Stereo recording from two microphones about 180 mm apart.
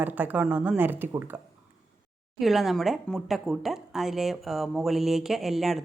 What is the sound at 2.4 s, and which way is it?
Speech, centre (ahead or behind).